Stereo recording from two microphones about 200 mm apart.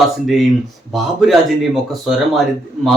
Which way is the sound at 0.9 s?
Centre (ahead or behind).